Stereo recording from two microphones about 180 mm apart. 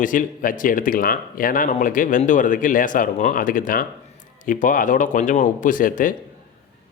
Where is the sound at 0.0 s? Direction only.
45° left (ahead or behind).